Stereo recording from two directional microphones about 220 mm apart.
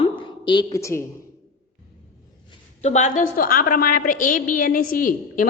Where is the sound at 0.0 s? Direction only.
20° left (ahead or behind).